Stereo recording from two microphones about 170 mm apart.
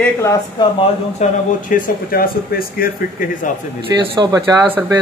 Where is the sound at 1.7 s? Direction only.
60° left (ahead or behind).